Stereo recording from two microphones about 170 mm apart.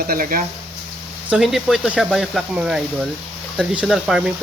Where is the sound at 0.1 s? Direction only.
55° right (ahead or behind).